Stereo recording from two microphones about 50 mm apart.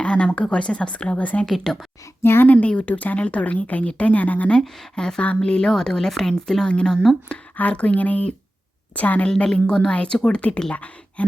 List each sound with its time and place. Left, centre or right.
0.0 s a sound: left
0.4 s a woman's voice: left
1.5 s speech: centre
2.2 s a woman's voice: left
2.5 s a woman's voice: left
4.9 s speech: centre
7.3 s a woman's voice: left
9.3 s a woman's voice: centre